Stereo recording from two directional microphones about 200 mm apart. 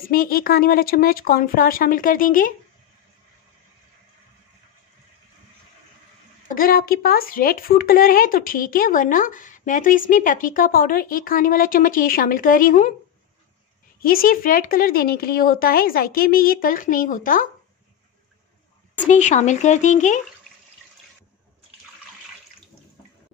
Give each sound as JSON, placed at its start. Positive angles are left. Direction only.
{"t": 0.1, "sound": "speech", "side_deg": 45}
{"t": 6.5, "sound": "speech", "side_deg": 45}
{"t": 14.0, "sound": "speech", "side_deg": 45}
{"t": 19.0, "sound": "speech", "side_deg": 35}